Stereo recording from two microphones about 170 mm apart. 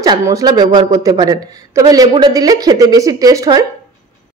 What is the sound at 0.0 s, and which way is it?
A man's voice, 25° right (ahead or behind).